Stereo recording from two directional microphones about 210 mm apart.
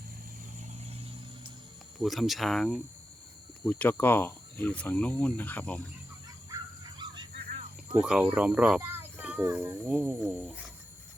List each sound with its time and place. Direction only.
2.0 s speech: centre (ahead or behind)
7.0 s a sound: 20° right (ahead or behind)
7.9 s speech: 5° right (ahead or behind)